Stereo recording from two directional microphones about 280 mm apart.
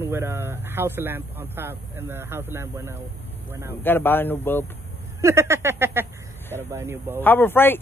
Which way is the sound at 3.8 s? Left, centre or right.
Centre.